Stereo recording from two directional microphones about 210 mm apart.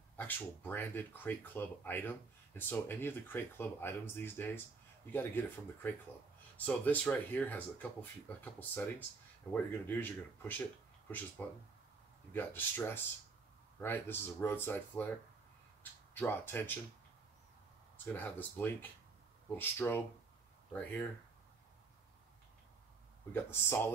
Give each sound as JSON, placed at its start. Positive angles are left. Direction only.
{"t": 0.7, "sound": "speech", "side_deg": 10}
{"t": 17.9, "sound": "speech", "side_deg": 10}
{"t": 23.3, "sound": "speech", "side_deg": 10}